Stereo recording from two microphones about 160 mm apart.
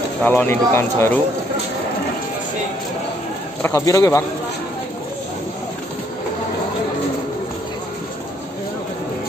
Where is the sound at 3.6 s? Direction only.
20° left (ahead or behind).